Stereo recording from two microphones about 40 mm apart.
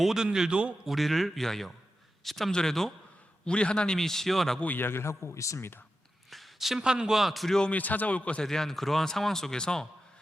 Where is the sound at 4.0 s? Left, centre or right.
Centre.